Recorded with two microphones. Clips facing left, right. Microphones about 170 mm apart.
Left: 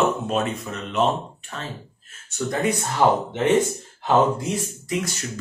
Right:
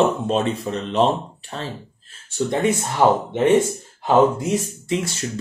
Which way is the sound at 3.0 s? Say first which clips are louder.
Right 2 dB; 15° right (ahead or behind).